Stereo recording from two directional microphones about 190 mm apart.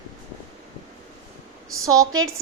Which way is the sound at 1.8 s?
20° right (ahead or behind).